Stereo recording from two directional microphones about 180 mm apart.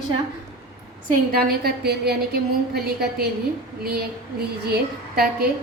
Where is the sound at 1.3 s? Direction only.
55° right (ahead or behind).